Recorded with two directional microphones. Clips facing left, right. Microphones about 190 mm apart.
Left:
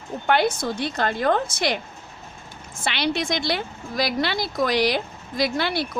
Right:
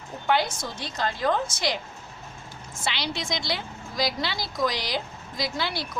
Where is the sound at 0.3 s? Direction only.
60° left (ahead or behind).